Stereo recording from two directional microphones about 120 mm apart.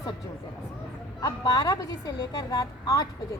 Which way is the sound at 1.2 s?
30° left (ahead or behind).